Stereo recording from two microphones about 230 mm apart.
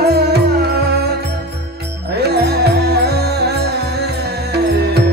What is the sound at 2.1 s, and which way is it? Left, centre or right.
Music, right.